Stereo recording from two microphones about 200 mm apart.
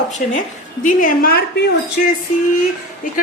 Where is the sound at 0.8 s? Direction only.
40° left (ahead or behind).